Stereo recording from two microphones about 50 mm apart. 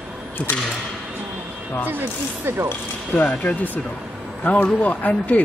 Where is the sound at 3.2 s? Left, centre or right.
Left.